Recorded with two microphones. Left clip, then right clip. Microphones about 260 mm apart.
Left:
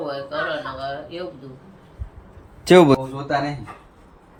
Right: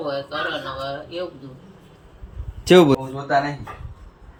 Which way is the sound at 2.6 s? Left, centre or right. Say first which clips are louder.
Left 1 dB; centre.